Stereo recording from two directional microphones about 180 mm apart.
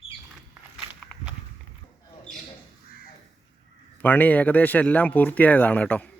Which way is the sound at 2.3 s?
5° left (ahead or behind).